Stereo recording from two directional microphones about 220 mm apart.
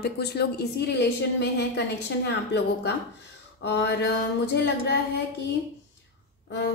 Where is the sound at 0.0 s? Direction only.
50° left (ahead or behind).